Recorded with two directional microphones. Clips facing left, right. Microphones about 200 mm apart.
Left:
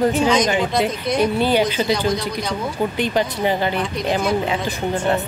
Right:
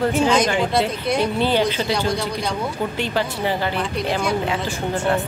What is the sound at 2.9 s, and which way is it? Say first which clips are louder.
Speech: left 3 dB; 15° left (ahead or behind).